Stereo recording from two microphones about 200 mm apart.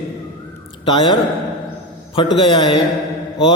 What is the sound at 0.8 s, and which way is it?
Mantra, 25° left (ahead or behind).